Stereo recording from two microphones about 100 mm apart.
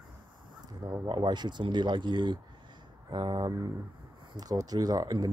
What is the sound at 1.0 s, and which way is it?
Speech, 50° right (ahead or behind).